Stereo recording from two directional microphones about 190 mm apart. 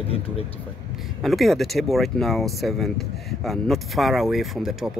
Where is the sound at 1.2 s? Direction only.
Centre (ahead or behind).